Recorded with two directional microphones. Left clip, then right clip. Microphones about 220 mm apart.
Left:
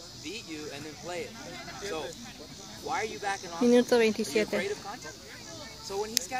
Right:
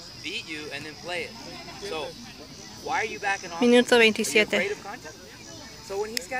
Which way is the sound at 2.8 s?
50° left (ahead or behind).